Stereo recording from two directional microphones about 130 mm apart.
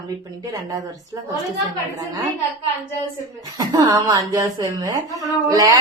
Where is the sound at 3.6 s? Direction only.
30° right (ahead or behind).